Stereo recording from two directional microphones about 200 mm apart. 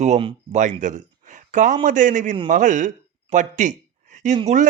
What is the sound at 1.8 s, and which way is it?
Speech, 40° right (ahead or behind).